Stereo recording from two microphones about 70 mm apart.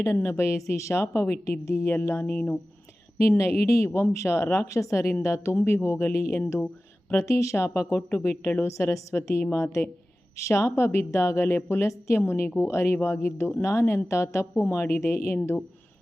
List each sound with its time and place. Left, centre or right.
0.0 s a woman's voice: left
8.6 s a woman's voice: left
12.2 s speech: left